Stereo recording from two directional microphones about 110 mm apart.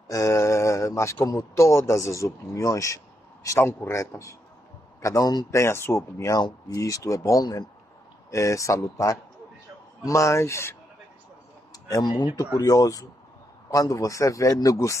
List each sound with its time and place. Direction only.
0.1 s speech: 30° left (ahead or behind)
5.5 s speech: 25° left (ahead or behind)
11.7 s speech: 35° left (ahead or behind)